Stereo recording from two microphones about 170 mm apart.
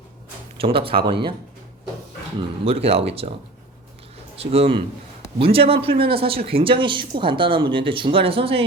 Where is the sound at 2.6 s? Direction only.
35° right (ahead or behind).